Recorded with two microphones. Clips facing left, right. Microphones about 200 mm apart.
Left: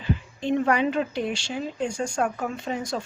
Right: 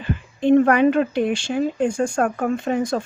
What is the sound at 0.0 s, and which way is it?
Speech, 55° right (ahead or behind).